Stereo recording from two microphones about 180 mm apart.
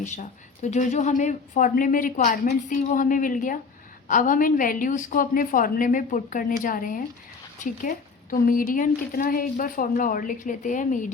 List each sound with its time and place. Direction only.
0.0 s a woman's voice: 45° left (ahead or behind)